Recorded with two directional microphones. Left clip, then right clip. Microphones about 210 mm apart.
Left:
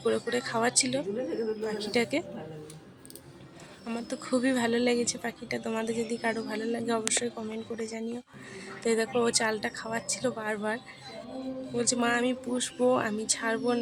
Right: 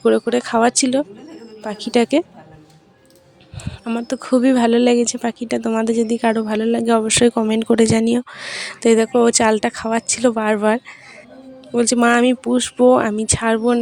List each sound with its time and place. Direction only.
0.0 s speech: 30° right (ahead or behind)
3.8 s speech: 30° right (ahead or behind)